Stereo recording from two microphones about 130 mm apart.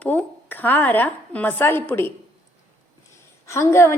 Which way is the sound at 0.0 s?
10° left (ahead or behind).